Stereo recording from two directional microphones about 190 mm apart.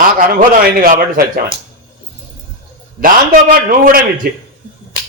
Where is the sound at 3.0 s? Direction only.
50° right (ahead or behind).